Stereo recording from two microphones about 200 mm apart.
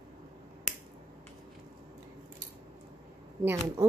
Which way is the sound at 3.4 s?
15° right (ahead or behind).